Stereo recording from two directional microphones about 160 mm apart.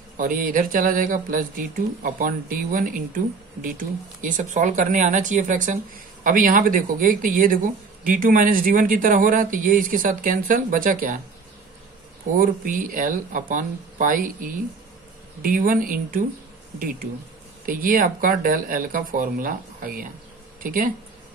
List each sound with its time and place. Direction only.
0.2 s speech: 60° right (ahead or behind)
12.4 s speech: 60° right (ahead or behind)
17.6 s speech: 60° right (ahead or behind)